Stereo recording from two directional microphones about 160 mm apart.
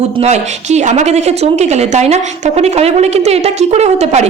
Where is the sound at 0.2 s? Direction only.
45° right (ahead or behind).